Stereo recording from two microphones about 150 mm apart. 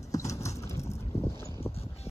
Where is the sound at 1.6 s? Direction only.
40° left (ahead or behind).